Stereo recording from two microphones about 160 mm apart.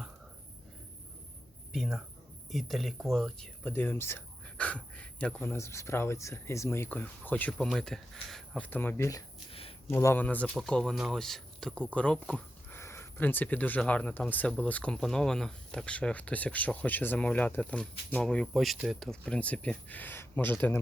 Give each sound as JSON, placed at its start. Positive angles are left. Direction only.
{"t": 1.7, "sound": "speech", "side_deg": 0}
{"t": 9.5, "sound": "a sound", "side_deg": 35}
{"t": 9.8, "sound": "speech", "side_deg": 15}